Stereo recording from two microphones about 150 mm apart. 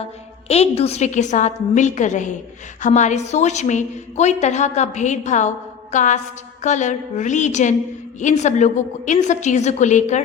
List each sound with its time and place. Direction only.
0.4 s a woman's voice: 45° left (ahead or behind)